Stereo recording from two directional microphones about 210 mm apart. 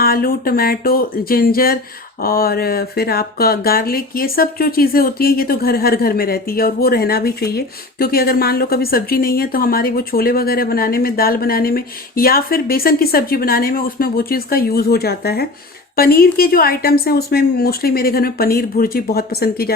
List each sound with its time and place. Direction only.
0.0 s speech: 45° left (ahead or behind)